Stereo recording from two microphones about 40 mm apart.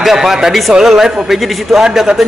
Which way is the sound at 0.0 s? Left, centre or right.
Centre.